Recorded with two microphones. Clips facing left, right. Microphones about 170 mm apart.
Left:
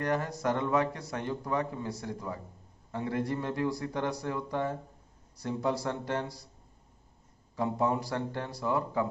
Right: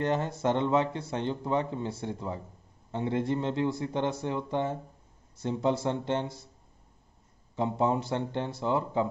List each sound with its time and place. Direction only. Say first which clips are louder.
0.0 s a man's voice: right 2 dB; 25° right (ahead or behind)
7.5 s a man's voice: right 2 dB; 25° right (ahead or behind)